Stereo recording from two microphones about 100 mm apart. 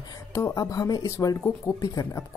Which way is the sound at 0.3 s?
30° left (ahead or behind).